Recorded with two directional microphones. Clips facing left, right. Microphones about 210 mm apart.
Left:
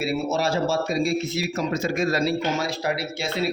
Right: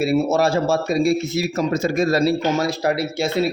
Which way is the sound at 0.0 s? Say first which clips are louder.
Right 6 dB; 50° right (ahead or behind).